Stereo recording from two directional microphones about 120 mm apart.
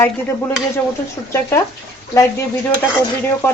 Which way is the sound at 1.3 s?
25° left (ahead or behind).